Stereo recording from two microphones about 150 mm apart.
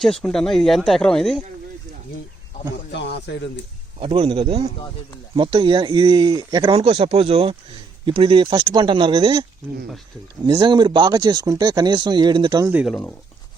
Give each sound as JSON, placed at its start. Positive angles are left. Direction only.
{"t": 0.0, "sound": "speech", "side_deg": 5}
{"t": 4.0, "sound": "speech", "side_deg": -35}
{"t": 12.8, "sound": "speech", "side_deg": 5}